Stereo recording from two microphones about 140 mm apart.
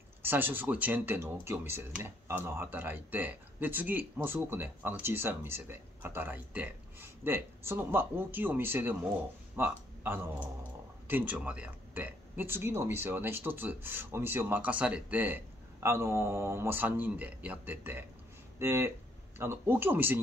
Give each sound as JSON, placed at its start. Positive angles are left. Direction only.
{"t": 0.2, "sound": "speech", "side_deg": -15}